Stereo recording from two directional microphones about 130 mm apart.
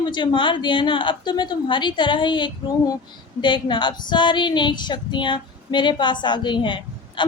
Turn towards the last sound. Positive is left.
turn(degrees=40)  # may be behind; listen again after turning